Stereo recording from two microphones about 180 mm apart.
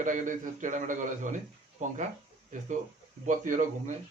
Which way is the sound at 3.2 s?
45° right (ahead or behind).